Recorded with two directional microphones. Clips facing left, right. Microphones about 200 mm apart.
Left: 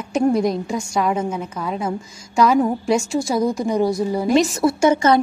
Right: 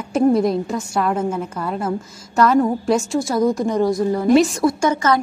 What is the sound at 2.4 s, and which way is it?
A woman's voice, 5° left (ahead or behind).